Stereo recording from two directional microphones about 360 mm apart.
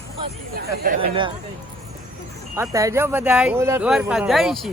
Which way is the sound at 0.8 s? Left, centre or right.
Centre.